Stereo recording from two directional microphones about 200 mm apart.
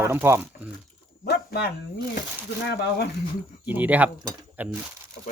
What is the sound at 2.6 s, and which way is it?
Speech, 55° left (ahead or behind).